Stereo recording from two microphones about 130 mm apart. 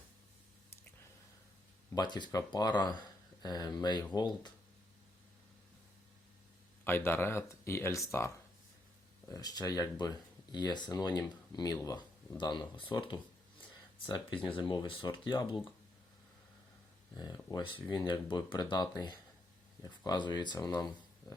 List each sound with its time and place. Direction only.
2.0 s speech: 35° left (ahead or behind)
6.8 s speech: 15° left (ahead or behind)
9.3 s speech: 30° left (ahead or behind)
14.4 s speech: 40° left (ahead or behind)
17.2 s speech: 30° left (ahead or behind)